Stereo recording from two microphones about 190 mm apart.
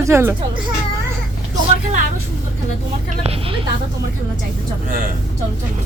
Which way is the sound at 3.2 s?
30° right (ahead or behind).